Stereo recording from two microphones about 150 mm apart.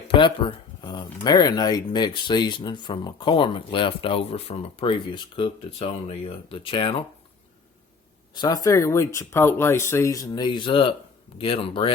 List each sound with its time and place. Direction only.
0.1 s speech: 35° left (ahead or behind)
8.4 s speech: 25° left (ahead or behind)